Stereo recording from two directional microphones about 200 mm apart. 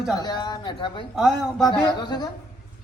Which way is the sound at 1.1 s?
Centre (ahead or behind).